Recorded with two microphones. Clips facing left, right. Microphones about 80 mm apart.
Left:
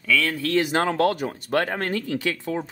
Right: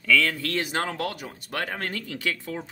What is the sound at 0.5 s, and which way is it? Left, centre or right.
Speech, left.